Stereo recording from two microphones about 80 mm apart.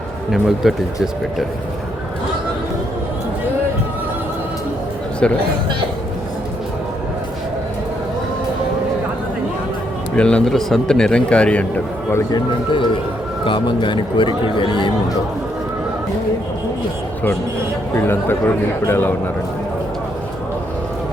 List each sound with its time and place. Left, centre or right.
0.3 s speech: centre
5.2 s speech: centre
10.2 s speech: centre
12.3 s speech: left
17.9 s a man's voice: left